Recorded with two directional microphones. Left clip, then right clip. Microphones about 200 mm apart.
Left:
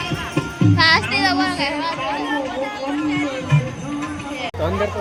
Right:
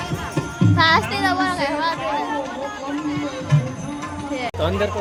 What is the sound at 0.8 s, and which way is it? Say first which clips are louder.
A child's voice: left 1 dB; 20° right (ahead or behind).